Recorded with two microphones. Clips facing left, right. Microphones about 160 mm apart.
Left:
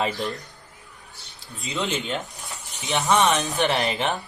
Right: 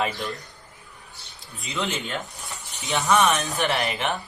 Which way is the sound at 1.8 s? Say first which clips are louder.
Left 1 dB; 20° left (ahead or behind).